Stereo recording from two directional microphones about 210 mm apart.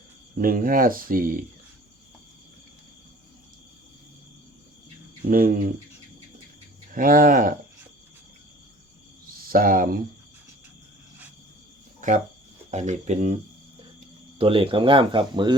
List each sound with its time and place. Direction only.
0.3 s speech: 40° right (ahead or behind)
5.3 s speech: 40° right (ahead or behind)
6.9 s speech: 40° right (ahead or behind)
9.5 s speech: 40° right (ahead or behind)
11.9 s cricket: 35° right (ahead or behind)
12.7 s speech: 35° right (ahead or behind)
14.3 s speech: 25° right (ahead or behind)